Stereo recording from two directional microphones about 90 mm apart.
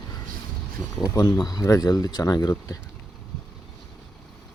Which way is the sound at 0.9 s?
40° left (ahead or behind).